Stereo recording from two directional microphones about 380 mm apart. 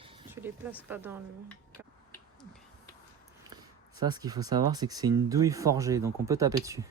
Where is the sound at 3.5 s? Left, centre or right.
Centre.